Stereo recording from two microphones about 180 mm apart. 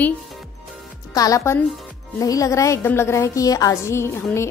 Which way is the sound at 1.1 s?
20° left (ahead or behind).